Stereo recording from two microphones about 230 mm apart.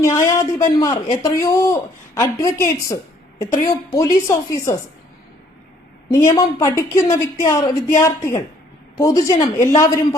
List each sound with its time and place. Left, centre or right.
0.0 s a woman's voice: centre
6.1 s a woman's voice: centre